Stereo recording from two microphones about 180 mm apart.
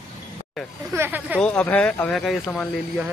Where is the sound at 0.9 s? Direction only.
10° right (ahead or behind).